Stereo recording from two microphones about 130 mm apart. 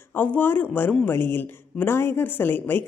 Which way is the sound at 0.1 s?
15° left (ahead or behind).